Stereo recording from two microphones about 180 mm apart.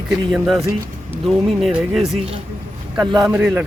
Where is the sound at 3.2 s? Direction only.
5° right (ahead or behind).